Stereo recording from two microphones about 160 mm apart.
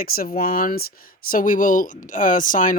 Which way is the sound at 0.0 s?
65° left (ahead or behind).